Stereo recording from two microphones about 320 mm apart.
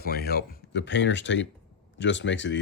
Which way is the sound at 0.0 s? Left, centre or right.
Left.